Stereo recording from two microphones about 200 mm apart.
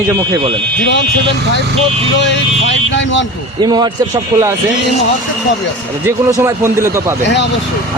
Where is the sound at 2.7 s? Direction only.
65° left (ahead or behind).